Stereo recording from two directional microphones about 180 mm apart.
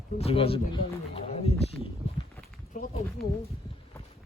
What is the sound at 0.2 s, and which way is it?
Speech, 30° left (ahead or behind).